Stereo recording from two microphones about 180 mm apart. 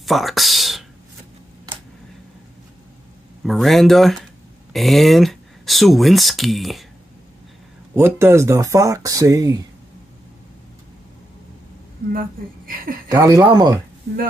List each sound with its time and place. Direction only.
0.0 s speech: centre (ahead or behind)
3.4 s speech: centre (ahead or behind)
7.9 s speech: 15° right (ahead or behind)
12.1 s speech: 50° right (ahead or behind)
13.1 s speech: 20° right (ahead or behind)